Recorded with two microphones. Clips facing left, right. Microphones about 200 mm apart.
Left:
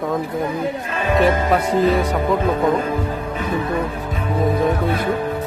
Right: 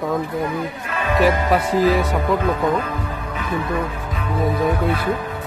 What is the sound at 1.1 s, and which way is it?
Speech, centre (ahead or behind).